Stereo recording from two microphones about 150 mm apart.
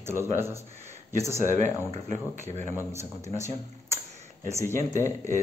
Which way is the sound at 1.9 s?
50° right (ahead or behind).